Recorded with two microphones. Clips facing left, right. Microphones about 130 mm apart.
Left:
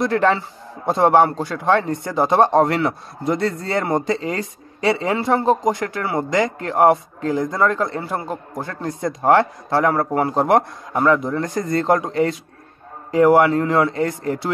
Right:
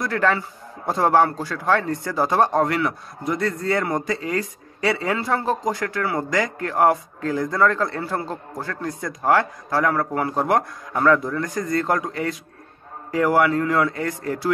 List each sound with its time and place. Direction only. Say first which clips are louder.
0.0 s speech: left 4 dB; 25° left (ahead or behind)